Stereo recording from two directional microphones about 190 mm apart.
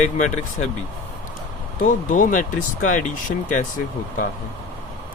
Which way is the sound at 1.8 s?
45° left (ahead or behind).